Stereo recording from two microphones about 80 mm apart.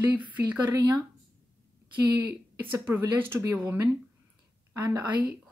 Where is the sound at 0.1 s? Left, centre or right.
Centre.